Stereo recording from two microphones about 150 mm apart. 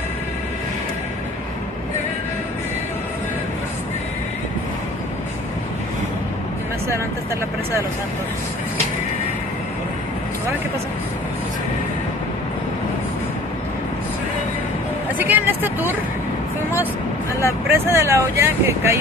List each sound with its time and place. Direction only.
15.1 s music: 10° right (ahead or behind)
17.6 s speech: 15° right (ahead or behind)